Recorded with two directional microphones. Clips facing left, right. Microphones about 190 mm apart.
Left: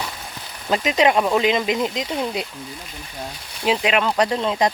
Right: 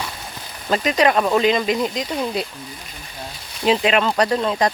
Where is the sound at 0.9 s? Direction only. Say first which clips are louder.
Even; 20° left (ahead or behind).